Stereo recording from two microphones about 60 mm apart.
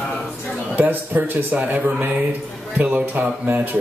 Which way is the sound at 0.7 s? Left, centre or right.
Right.